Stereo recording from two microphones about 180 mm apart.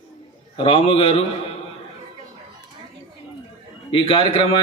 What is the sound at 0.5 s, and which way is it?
Speech, 30° left (ahead or behind).